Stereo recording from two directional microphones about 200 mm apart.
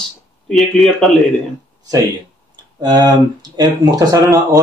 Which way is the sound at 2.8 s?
20° right (ahead or behind).